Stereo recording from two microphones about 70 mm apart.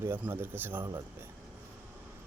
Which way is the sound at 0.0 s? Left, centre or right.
Right.